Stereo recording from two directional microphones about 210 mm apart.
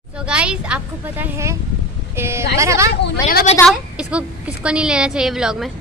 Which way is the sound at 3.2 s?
35° left (ahead or behind).